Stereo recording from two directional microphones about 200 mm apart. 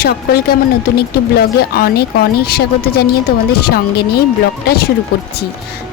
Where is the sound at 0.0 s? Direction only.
50° left (ahead or behind).